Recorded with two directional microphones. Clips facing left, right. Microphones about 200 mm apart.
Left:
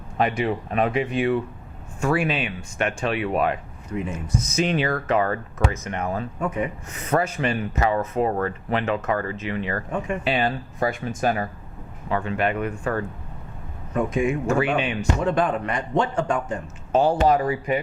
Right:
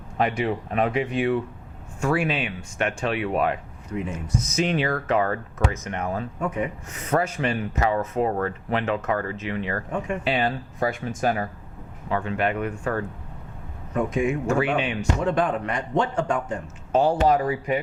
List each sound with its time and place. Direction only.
0.2 s speech: 15° left (ahead or behind)
14.2 s speech: 15° left (ahead or behind)